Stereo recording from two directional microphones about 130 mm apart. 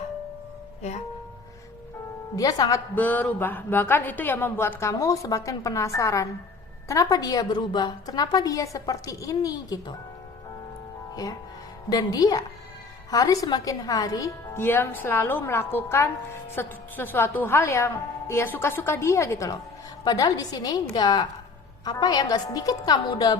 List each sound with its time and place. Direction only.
2.3 s a woman's voice: 30° left (ahead or behind)
2.9 s a woman's voice: 15° left (ahead or behind); by 9.9 s 30° left (ahead or behind)
11.1 s a woman's voice: 30° left (ahead or behind)
14.6 s a woman's voice: 15° left (ahead or behind); by 23.4 s 35° left (ahead or behind)